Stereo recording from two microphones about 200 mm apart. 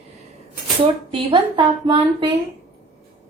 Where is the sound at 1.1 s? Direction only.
20° right (ahead or behind).